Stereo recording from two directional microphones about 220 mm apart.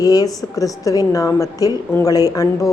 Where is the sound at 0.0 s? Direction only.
15° left (ahead or behind).